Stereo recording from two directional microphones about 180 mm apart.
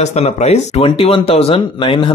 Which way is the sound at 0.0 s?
35° left (ahead or behind).